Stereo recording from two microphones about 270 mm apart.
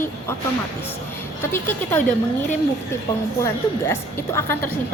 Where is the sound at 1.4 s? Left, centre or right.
Centre.